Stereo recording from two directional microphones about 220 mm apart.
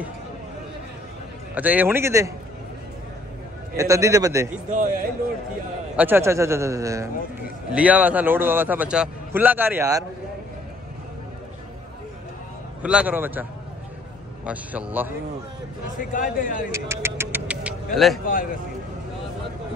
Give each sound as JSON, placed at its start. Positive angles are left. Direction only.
{"t": 1.5, "sound": "a man's voice", "side_deg": -5}
{"t": 3.7, "sound": "a man's voice", "side_deg": -15}
{"t": 4.6, "sound": "a man's voice", "side_deg": -35}
{"t": 5.9, "sound": "a man's voice", "side_deg": -10}
{"t": 12.8, "sound": "a man's voice", "side_deg": -5}
{"t": 16.0, "sound": "a man's voice", "side_deg": 40}
{"t": 16.7, "sound": "music", "side_deg": -10}
{"t": 17.9, "sound": "speech", "side_deg": 0}
{"t": 18.2, "sound": "a man's voice", "side_deg": 40}